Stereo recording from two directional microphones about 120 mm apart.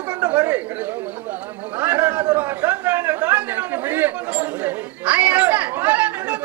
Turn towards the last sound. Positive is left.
turn(degrees=-10)  # may be behind; listen again after turning